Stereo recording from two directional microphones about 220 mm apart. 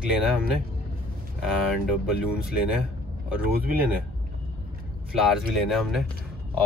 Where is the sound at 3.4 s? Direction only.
40° right (ahead or behind).